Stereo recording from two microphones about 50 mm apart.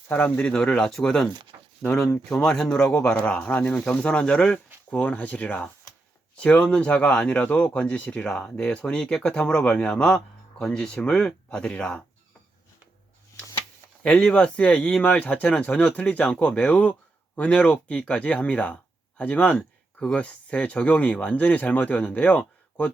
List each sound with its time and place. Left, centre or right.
0.1 s speech: left; by 2.9 s centre
3.2 s speech: left
14.0 s speech: left
20.0 s speech: centre
20.2 s speech: left